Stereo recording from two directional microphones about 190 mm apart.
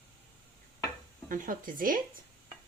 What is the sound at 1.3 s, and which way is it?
Speech, 45° right (ahead or behind).